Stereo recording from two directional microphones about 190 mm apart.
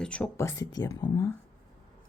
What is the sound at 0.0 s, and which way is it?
Speech, 5° left (ahead or behind).